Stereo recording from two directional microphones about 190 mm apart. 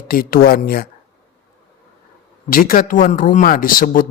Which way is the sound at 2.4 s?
50° left (ahead or behind).